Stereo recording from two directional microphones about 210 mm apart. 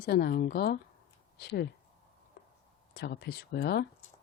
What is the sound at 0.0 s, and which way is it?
Speech, 50° left (ahead or behind).